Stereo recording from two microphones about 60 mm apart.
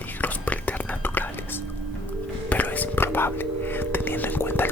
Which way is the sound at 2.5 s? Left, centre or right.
Left.